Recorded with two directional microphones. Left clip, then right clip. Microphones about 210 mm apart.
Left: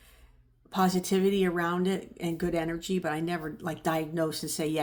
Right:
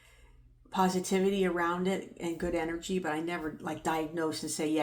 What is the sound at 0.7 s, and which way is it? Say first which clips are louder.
Speech: left 2 dB; 45° left (ahead or behind).